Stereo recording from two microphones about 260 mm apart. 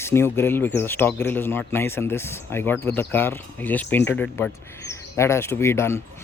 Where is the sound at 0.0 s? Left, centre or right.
Centre.